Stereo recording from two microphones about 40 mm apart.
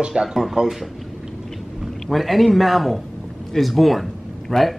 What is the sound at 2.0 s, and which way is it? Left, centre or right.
A man's voice, centre.